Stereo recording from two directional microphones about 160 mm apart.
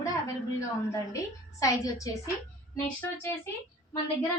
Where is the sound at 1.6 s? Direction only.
20° left (ahead or behind).